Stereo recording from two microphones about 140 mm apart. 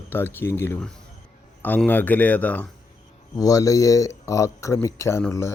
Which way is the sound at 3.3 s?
25° left (ahead or behind).